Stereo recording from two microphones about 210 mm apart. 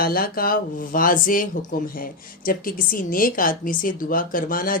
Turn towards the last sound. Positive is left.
turn(degrees=40)  # may be behind; listen again after turning